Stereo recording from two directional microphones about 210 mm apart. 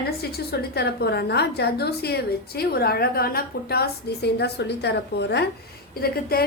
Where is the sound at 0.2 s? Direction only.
50° left (ahead or behind).